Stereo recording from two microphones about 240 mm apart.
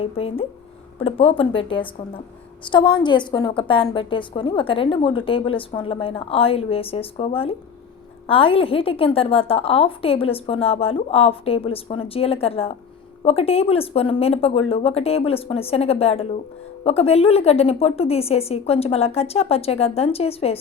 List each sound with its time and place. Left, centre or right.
0.0 s a woman's voice: left